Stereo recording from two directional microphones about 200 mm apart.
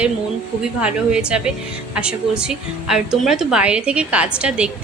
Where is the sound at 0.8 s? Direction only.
5° right (ahead or behind).